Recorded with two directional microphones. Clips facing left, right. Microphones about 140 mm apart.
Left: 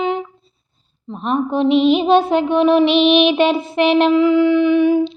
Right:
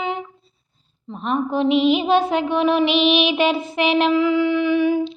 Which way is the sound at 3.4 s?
25° left (ahead or behind).